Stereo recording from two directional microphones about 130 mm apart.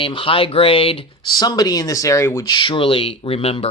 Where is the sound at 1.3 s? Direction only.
30° left (ahead or behind).